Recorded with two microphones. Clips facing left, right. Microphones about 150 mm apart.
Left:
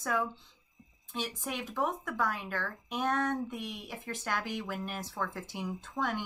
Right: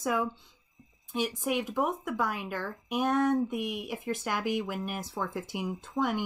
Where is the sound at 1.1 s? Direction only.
10° right (ahead or behind).